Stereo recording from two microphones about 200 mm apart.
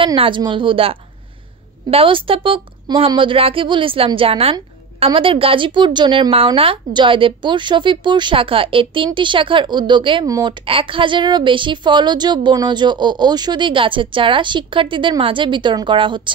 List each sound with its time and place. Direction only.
0.0 s a woman's voice: 25° right (ahead or behind)